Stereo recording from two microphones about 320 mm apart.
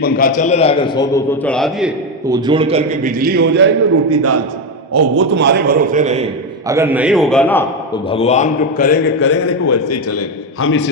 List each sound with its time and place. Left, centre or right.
0.0 s a man's voice: left; by 1.9 s centre
2.3 s a man's voice: centre; by 3.7 s right
4.1 s a man's voice: right
6.7 s a man's voice: centre
8.1 s a man's voice: centre
9.2 s a man's voice: left